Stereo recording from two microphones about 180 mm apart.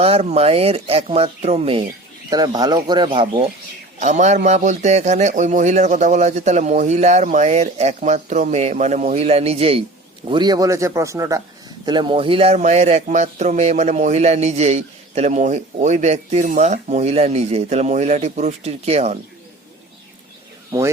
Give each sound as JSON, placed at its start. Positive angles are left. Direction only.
{"t": 0.0, "sound": "speech", "side_deg": -35}
{"t": 2.3, "sound": "speech", "side_deg": -20}
{"t": 4.0, "sound": "a man's voice", "side_deg": -40}